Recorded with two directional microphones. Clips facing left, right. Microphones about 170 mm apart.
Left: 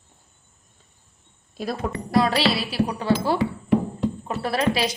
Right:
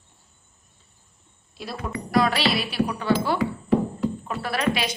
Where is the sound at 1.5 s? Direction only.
40° left (ahead or behind).